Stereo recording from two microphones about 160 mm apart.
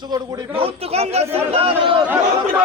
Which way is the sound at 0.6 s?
40° right (ahead or behind).